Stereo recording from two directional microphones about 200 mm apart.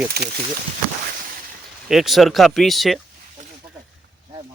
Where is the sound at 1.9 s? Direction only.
Centre (ahead or behind).